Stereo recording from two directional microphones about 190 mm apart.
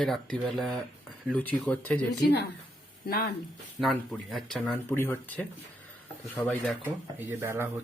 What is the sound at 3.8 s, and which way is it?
Speech, centre (ahead or behind).